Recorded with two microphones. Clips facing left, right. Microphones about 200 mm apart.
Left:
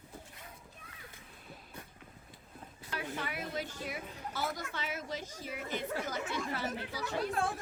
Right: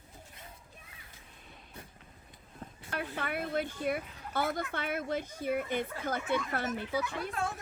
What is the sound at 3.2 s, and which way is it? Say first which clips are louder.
A woman's voice: right 7 dB; 55° right (ahead or behind).